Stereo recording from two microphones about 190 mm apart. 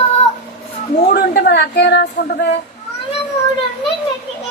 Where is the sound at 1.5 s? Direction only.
60° left (ahead or behind).